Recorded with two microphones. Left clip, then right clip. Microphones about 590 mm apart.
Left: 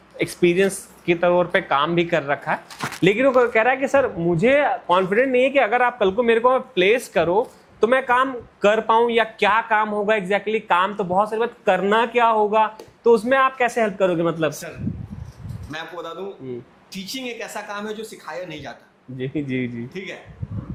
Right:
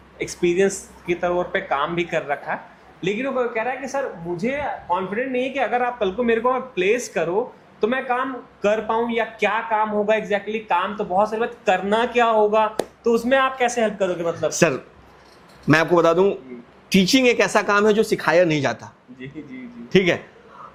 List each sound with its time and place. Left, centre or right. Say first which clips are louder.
0.2 s speech: left 1 dB; centre
3.0 s speech: left 7 dB; left
15.7 s speech: right 16 dB; right
19.9 s a man's voice: right 15 dB; right